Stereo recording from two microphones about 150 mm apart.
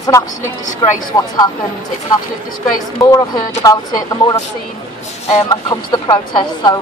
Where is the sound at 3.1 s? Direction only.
25° left (ahead or behind).